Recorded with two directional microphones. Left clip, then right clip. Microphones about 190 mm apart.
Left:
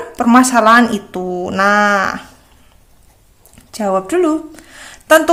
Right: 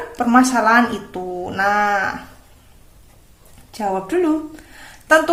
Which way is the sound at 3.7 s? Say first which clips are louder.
Left 5 dB; 35° left (ahead or behind).